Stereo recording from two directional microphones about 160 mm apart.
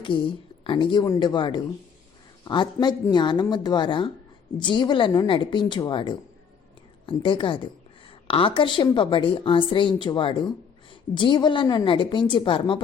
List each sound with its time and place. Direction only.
0.1 s a woman's voice: 30° left (ahead or behind)